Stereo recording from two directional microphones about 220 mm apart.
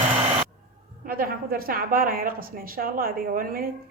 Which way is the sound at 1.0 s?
40° right (ahead or behind).